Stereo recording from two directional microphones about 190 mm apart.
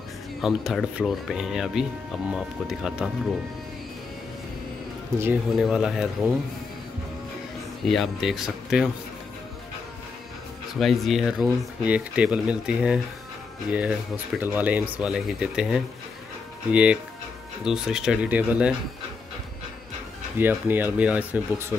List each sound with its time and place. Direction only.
0.4 s speech: centre (ahead or behind)
5.5 s speech: centre (ahead or behind)
7.9 s speech: centre (ahead or behind)
10.8 s speech: centre (ahead or behind)
20.3 s speech: 10° right (ahead or behind)